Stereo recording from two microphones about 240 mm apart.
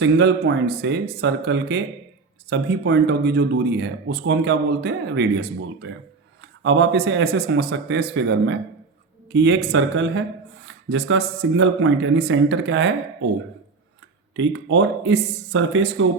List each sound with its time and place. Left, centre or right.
0.0 s speech: right
14.3 s speech: right